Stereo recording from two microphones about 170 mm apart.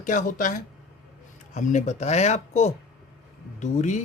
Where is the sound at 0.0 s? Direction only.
50° left (ahead or behind).